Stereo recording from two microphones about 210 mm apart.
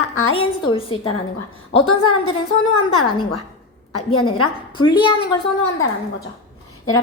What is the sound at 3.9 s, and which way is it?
Speech, 90° left.